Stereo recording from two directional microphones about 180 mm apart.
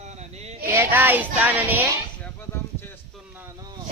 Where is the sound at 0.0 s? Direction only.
40° right (ahead or behind).